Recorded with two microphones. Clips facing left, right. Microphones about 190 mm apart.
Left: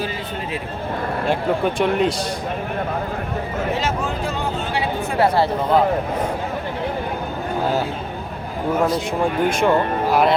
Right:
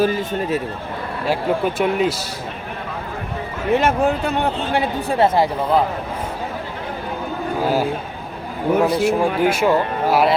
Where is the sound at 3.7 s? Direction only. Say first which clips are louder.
Right 6 dB; 60° right (ahead or behind).